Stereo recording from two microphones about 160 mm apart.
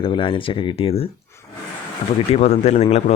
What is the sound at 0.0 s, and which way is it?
A man's voice, 35° left (ahead or behind).